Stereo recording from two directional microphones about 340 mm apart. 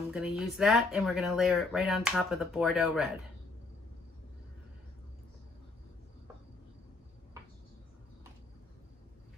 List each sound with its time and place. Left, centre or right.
0.1 s speech: centre